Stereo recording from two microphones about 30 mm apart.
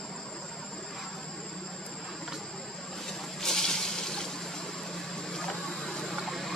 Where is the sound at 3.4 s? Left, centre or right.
Centre.